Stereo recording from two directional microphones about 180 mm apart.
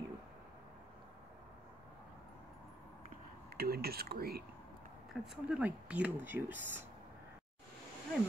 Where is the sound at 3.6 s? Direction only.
60° right (ahead or behind).